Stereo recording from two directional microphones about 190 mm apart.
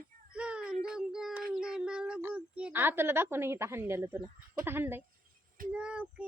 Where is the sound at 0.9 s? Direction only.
5° right (ahead or behind).